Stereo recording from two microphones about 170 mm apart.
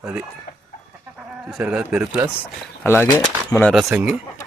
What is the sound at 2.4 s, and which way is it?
Speech, 15° left (ahead or behind).